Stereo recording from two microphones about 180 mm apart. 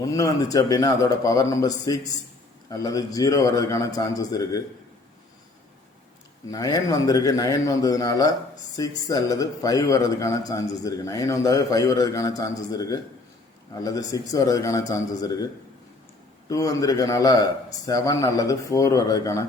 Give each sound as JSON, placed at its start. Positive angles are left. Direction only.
{"t": 0.0, "sound": "a man's voice", "side_deg": 20}
{"t": 6.5, "sound": "a man's voice", "side_deg": 20}
{"t": 16.5, "sound": "a man's voice", "side_deg": 20}